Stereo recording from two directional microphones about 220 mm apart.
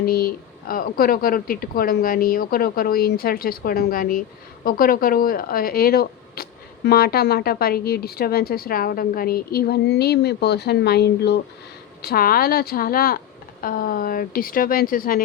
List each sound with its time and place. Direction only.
0.0 s speech: 45° left (ahead or behind)